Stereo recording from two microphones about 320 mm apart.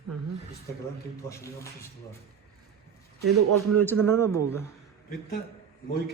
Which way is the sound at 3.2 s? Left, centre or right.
Right.